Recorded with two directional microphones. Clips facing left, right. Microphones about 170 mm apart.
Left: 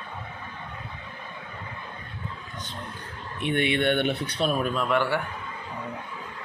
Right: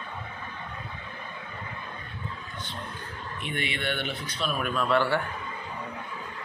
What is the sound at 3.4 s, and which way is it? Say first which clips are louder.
Speech: left 9 dB; 60° left (ahead or behind).